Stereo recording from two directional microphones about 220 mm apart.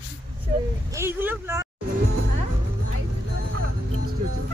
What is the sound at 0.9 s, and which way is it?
Speech, 10° right (ahead or behind).